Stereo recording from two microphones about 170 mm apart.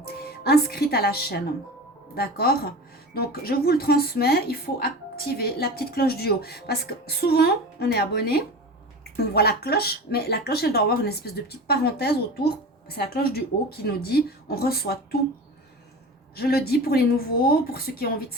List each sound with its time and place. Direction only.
0.0 s speech: 65° left (ahead or behind)
16.3 s speech: 65° left (ahead or behind)